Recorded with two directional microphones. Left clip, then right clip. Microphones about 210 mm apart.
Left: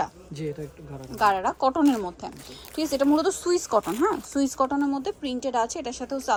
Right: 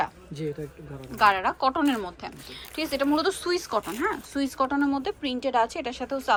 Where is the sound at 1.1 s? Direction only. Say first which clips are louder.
Right 1 dB; 15° left (ahead or behind).